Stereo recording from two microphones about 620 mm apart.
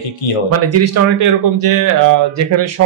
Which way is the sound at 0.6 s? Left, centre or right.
Right.